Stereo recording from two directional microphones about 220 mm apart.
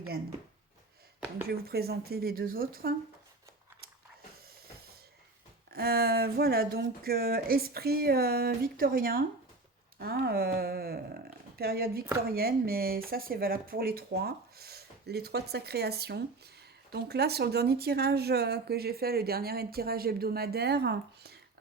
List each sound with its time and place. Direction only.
1.5 s speech: 45° right (ahead or behind)
5.7 s speech: 45° right (ahead or behind)